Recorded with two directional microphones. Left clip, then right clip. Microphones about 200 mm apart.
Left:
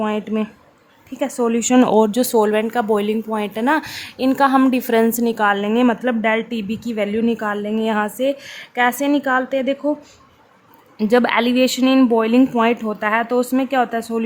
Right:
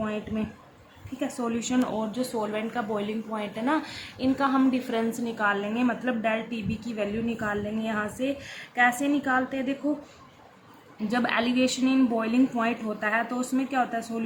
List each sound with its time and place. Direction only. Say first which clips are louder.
0.0 s speech: left 10 dB; 45° left (ahead or behind)
10.9 s speech: left 11 dB; 50° left (ahead or behind)